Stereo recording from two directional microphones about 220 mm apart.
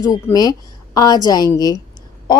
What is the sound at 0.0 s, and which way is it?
A woman's voice, 15° left (ahead or behind).